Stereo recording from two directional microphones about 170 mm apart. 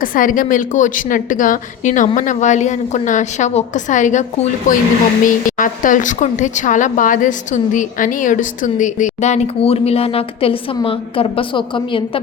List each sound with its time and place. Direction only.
0.0 s speech: 55° left (ahead or behind); by 12.2 s 30° left (ahead or behind)